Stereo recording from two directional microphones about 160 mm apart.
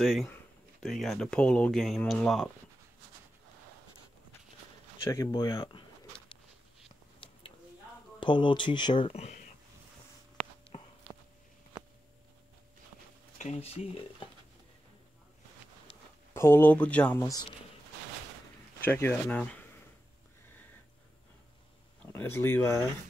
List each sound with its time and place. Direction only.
0.0 s speech: centre (ahead or behind)
5.0 s speech: 20° left (ahead or behind)
8.2 s speech: 30° left (ahead or behind)
13.4 s speech: 40° left (ahead or behind)
16.3 s speech: 15° left (ahead or behind)
18.9 s speech: 15° left (ahead or behind)
22.0 s speech: 10° left (ahead or behind)